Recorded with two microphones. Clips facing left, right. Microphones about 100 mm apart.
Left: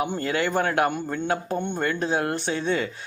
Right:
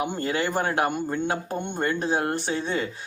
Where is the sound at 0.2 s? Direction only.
35° right (ahead or behind).